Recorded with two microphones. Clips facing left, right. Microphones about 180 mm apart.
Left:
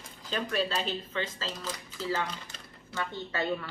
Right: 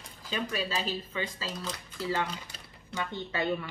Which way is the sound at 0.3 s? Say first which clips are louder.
Left 2 dB; 5° right (ahead or behind).